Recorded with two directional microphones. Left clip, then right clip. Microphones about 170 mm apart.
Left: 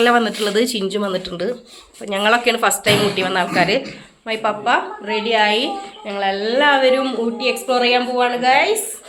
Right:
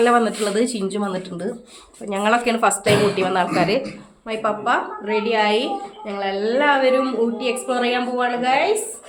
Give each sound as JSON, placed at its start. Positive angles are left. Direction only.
{"t": 0.0, "sound": "a woman's voice", "side_deg": 0}